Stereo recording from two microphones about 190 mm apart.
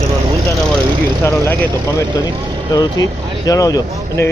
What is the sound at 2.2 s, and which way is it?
Speech, 15° left (ahead or behind).